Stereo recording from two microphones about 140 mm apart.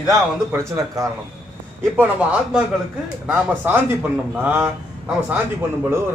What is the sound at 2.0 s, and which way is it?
Speech, 10° right (ahead or behind).